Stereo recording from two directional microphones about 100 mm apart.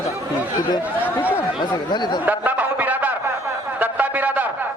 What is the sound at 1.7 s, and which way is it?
Speech, 45° left (ahead or behind).